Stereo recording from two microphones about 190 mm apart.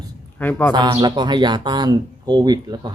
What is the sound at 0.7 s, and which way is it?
Speech, 25° right (ahead or behind).